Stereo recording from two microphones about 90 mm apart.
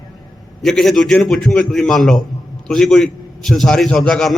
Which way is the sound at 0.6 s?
5° left (ahead or behind).